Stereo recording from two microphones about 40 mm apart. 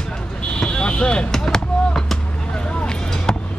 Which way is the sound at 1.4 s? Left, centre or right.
Centre.